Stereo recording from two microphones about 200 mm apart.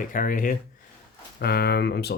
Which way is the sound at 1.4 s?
55° left (ahead or behind).